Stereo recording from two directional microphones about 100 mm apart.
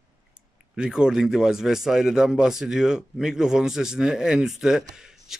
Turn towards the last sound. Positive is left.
turn(degrees=-5)  # may be behind; listen again after turning